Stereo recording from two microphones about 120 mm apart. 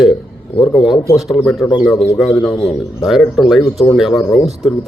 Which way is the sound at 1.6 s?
35° left (ahead or behind).